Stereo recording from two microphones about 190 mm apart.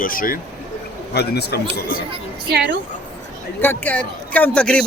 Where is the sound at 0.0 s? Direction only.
45° left (ahead or behind).